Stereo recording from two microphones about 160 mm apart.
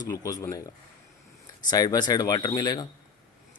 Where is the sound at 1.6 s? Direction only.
25° left (ahead or behind).